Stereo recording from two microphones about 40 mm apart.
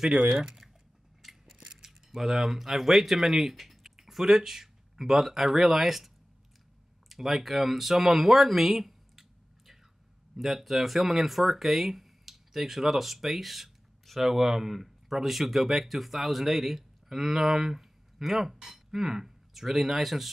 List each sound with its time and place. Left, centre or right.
0.1 s speech: right
1.2 s crushing: centre
1.7 s speech: centre
10.3 s speech: centre